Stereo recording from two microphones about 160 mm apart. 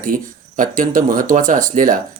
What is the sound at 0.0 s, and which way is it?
Speech, 55° right (ahead or behind).